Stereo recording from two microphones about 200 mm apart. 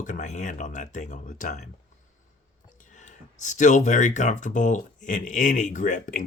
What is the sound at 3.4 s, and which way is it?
Speech, 40° left (ahead or behind).